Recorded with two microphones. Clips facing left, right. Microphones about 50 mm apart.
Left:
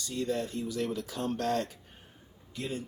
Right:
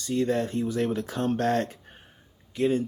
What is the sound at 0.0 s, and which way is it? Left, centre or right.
Speech, right.